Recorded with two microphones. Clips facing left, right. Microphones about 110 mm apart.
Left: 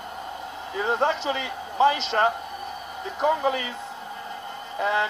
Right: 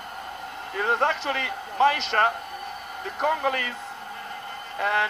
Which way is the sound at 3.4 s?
60° right (ahead or behind).